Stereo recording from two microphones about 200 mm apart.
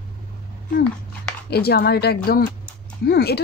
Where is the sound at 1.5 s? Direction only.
55° left (ahead or behind).